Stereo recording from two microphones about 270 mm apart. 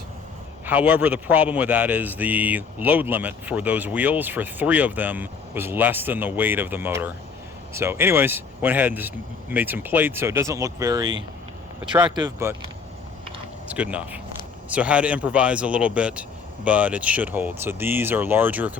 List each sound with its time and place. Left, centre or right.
0.6 s a man's voice: centre
13.7 s a man's voice: centre